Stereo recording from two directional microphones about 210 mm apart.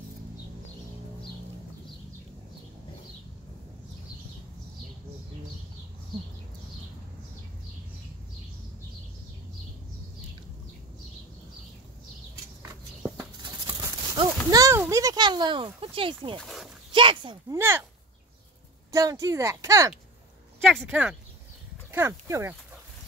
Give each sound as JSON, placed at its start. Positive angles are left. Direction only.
{"t": 13.2, "sound": "a sound", "side_deg": -20}
{"t": 16.3, "sound": "dog", "side_deg": 0}
{"t": 16.9, "sound": "speech", "side_deg": -25}
{"t": 17.6, "sound": "speech", "side_deg": -10}
{"t": 18.9, "sound": "speech", "side_deg": -15}
{"t": 20.6, "sound": "speech", "side_deg": -5}